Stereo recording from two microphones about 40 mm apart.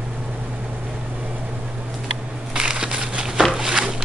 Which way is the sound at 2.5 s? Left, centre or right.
Centre.